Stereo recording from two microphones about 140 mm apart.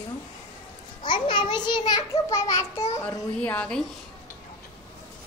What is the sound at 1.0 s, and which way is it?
A child's voice, 35° left (ahead or behind).